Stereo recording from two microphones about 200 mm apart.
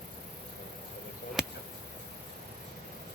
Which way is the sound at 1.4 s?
Centre (ahead or behind).